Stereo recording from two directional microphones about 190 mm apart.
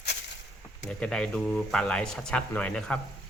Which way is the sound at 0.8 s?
5° left (ahead or behind).